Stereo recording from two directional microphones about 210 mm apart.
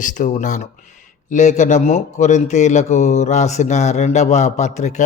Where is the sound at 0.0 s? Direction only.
40° left (ahead or behind).